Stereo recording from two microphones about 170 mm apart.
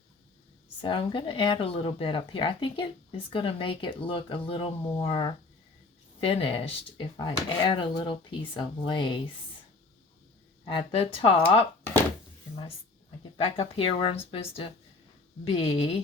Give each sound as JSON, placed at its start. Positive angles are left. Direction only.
{"t": 0.8, "sound": "speech", "side_deg": 30}
{"t": 10.7, "sound": "speech", "side_deg": 35}
{"t": 13.3, "sound": "speech", "side_deg": 30}